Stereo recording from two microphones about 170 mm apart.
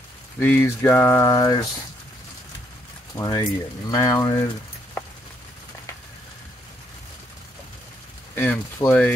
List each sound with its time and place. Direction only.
0.4 s speech: 10° left (ahead or behind)
3.2 s speech: 20° left (ahead or behind)
8.4 s speech: 10° left (ahead or behind)